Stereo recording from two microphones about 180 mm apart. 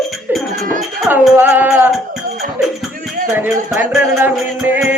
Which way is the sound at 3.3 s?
10° right (ahead or behind).